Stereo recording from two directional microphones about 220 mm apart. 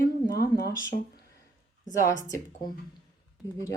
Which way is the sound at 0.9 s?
35° left (ahead or behind).